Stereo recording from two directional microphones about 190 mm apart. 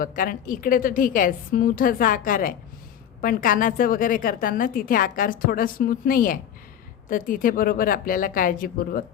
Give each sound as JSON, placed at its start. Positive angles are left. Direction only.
{"t": 0.0, "sound": "a woman's voice", "side_deg": 45}